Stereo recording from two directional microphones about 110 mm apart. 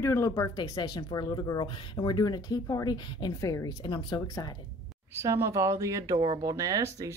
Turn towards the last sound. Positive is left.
turn(degrees=-30)  # may be behind; listen again after turning